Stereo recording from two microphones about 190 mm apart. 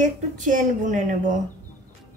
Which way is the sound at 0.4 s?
40° right (ahead or behind).